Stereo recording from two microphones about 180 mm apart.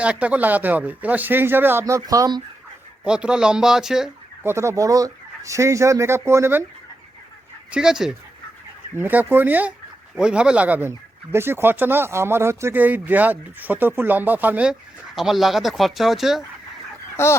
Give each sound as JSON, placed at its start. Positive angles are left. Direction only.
{"t": 0.0, "sound": "speech", "side_deg": -5}
{"t": 3.0, "sound": "speech", "side_deg": -5}
{"t": 4.5, "sound": "speech", "side_deg": -15}
{"t": 7.7, "sound": "speech", "side_deg": -5}
{"t": 17.2, "sound": "speech", "side_deg": 15}